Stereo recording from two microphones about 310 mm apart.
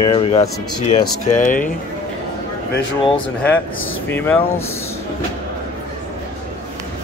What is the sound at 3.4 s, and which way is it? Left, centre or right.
Speech, centre.